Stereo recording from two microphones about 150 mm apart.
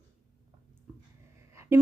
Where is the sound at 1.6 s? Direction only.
20° right (ahead or behind).